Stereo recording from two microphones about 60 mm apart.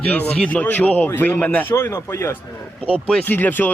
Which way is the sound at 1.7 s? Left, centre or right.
Left.